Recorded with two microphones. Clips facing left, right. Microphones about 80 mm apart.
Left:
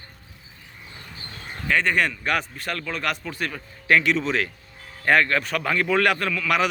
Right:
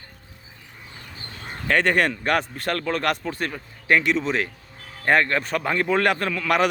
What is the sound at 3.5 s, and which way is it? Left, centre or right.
A man's voice, right.